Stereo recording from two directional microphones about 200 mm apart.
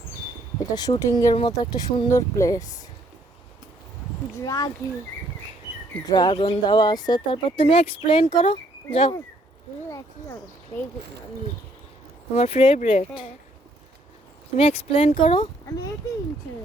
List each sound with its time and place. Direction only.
0.7 s speech: 20° left (ahead or behind)
4.4 s speech: 20° left (ahead or behind)
6.1 s speech: 20° left (ahead or behind)
10.7 s speech: 15° left (ahead or behind)
12.3 s speech: 30° left (ahead or behind)
14.5 s speech: 30° left (ahead or behind)